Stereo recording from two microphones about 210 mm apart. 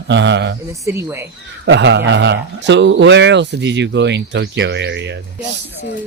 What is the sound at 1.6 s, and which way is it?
A man's voice, 60° right (ahead or behind).